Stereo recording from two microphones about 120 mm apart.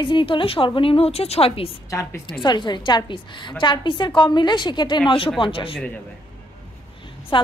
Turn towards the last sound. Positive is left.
turn(degrees=45)  # may be behind; listen again after turning